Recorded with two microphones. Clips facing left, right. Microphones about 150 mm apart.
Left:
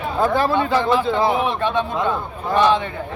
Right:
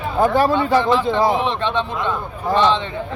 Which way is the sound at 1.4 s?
10° left (ahead or behind).